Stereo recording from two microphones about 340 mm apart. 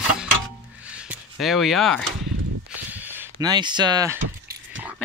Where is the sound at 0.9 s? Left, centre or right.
Centre.